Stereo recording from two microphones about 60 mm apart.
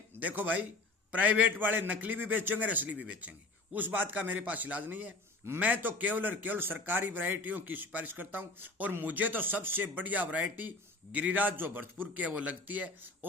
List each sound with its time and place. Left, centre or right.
0.2 s a man's voice: right